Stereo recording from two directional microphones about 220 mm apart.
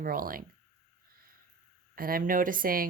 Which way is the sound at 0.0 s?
40° right (ahead or behind).